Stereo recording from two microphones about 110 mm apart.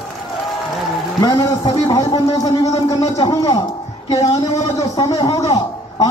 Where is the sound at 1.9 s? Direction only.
30° left (ahead or behind).